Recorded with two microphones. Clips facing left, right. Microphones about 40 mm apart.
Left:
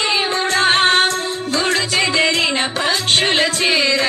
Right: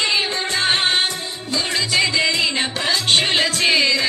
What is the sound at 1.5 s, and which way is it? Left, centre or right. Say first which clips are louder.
Music: left 3 dB; left.